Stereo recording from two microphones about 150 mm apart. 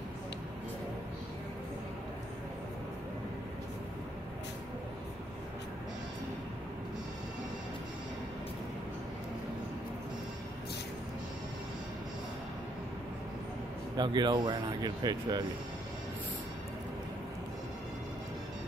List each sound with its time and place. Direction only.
13.9 s speech: 30° right (ahead or behind)